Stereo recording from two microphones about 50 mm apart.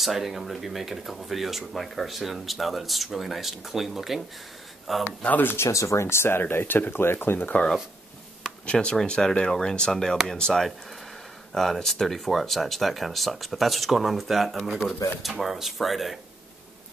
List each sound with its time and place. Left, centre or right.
0.0 s speech: centre
5.6 s speech: left
6.5 s speech: left
7.3 s speech: left
8.6 s speech: left; by 16.2 s centre